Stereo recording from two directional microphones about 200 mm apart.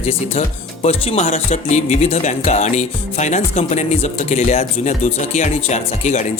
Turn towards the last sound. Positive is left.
turn(degrees=35)  # may be behind; listen again after turning